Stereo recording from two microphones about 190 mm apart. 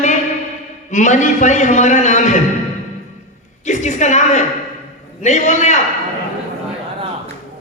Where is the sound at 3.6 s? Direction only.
40° left (ahead or behind).